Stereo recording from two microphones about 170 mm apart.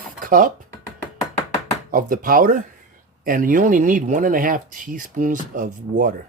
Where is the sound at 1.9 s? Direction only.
55° right (ahead or behind).